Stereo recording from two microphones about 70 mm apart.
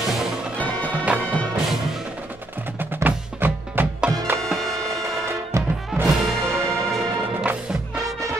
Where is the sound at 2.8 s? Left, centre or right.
Right.